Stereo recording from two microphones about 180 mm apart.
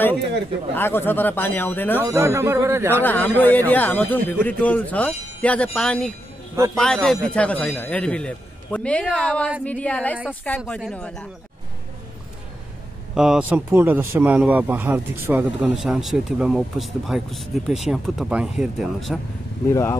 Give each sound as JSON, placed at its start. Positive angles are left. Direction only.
{"t": 0.7, "sound": "a man's voice", "side_deg": 10}
{"t": 2.0, "sound": "speech", "side_deg": -15}
{"t": 3.0, "sound": "a man's voice", "side_deg": 10}
{"t": 13.1, "sound": "a man's voice", "side_deg": -5}
{"t": 19.7, "sound": "a man's voice", "side_deg": 15}